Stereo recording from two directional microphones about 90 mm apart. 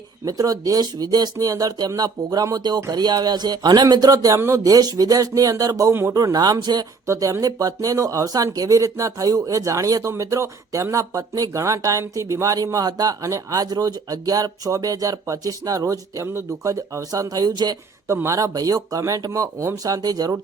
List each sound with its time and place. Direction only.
0.3 s speech: 40° right (ahead or behind)
5.9 s speech: 25° right (ahead or behind)
6.1 s speech: 45° right (ahead or behind)
7.1 s speech: 35° right (ahead or behind)
18.1 s speech: 35° right (ahead or behind)